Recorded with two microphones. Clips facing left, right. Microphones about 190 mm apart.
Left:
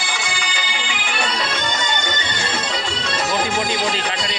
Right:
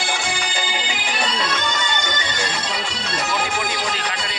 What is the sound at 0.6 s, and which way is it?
Music, 40° right (ahead or behind).